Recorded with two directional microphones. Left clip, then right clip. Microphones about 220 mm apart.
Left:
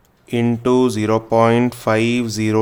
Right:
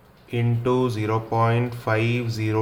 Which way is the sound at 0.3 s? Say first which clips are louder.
Left 7 dB; 50° left (ahead or behind).